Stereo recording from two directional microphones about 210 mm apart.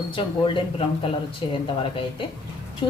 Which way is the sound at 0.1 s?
25° left (ahead or behind).